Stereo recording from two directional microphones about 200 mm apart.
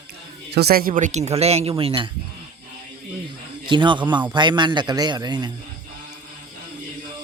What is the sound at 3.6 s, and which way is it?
A man's voice, 25° right (ahead or behind).